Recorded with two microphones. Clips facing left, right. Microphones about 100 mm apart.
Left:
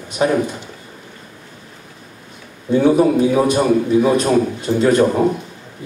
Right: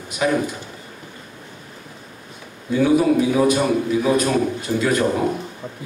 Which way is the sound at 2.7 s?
30° left (ahead or behind).